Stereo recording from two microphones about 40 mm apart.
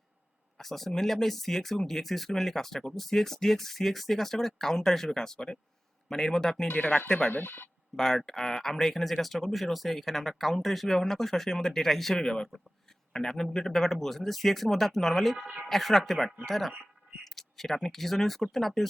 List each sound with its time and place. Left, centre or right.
0.6 s speech: centre
6.7 s speech: left
7.4 s speech: left
7.9 s speech: centre